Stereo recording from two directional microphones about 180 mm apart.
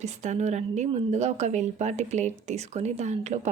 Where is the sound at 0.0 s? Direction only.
40° right (ahead or behind).